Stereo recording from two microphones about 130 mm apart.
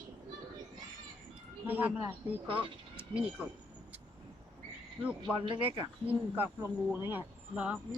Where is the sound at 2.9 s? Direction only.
10° right (ahead or behind).